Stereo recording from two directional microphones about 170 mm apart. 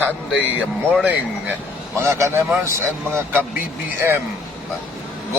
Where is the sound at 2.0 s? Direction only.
15° right (ahead or behind).